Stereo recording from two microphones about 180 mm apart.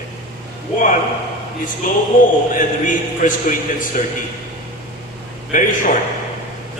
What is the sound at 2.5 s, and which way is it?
A man's voice, 45° left (ahead or behind).